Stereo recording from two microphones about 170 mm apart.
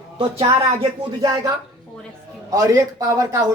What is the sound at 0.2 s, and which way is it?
Speech, 30° right (ahead or behind).